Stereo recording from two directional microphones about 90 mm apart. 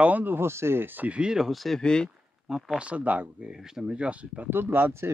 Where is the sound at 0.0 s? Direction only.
20° right (ahead or behind); by 2.0 s 10° left (ahead or behind).